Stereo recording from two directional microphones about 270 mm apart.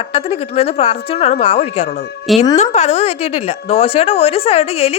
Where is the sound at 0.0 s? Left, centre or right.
Left.